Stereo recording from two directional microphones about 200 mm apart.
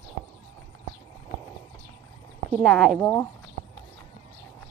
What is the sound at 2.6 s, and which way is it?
Speech, centre (ahead or behind).